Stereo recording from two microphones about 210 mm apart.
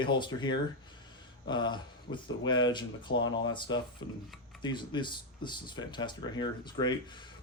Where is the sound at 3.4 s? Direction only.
20° left (ahead or behind).